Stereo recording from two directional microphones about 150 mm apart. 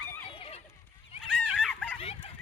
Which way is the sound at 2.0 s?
40° left (ahead or behind).